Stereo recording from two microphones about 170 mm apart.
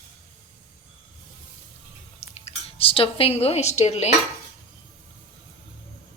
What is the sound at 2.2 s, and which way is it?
Speech, 35° left (ahead or behind).